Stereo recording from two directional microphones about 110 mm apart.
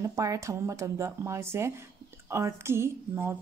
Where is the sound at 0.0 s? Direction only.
30° right (ahead or behind).